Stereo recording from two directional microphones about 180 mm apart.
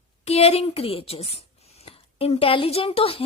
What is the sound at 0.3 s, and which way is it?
A woman's voice, 35° left (ahead or behind).